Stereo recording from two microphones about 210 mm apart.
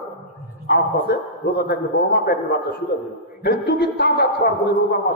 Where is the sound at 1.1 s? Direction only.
45° left (ahead or behind).